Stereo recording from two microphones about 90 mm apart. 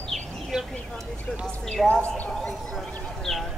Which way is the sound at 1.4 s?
10° left (ahead or behind).